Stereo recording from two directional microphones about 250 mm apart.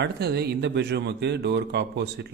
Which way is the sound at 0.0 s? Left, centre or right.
Right.